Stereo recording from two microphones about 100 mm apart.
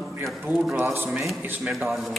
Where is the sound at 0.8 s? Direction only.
20° right (ahead or behind).